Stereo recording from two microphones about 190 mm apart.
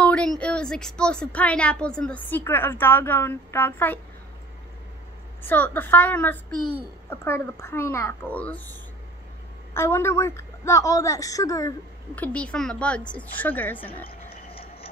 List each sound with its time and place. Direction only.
0.0 s speech: 5° left (ahead or behind)
5.4 s speech: 10° left (ahead or behind)
9.8 s speech: 15° left (ahead or behind)
12.2 s speech: 5° left (ahead or behind)
14.5 s a sound: 30° left (ahead or behind)